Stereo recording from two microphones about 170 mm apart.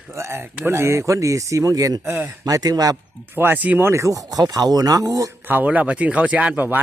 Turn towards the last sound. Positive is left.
turn(degrees=-10)  # may be behind; listen again after turning